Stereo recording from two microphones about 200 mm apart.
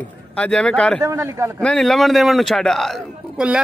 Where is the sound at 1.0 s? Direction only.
15° right (ahead or behind).